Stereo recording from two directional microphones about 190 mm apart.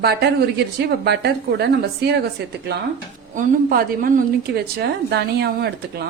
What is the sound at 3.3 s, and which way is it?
A woman's voice, 45° right (ahead or behind).